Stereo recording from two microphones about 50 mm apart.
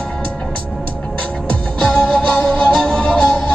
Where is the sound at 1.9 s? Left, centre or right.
Centre.